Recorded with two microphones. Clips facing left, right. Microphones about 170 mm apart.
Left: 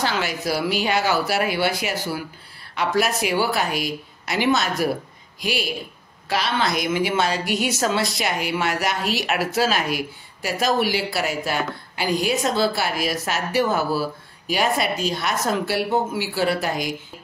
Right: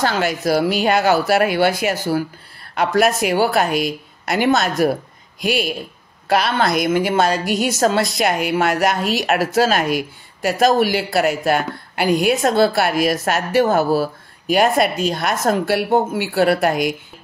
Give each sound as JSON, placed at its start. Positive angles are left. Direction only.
{"t": 0.0, "sound": "a woman's voice", "side_deg": -45}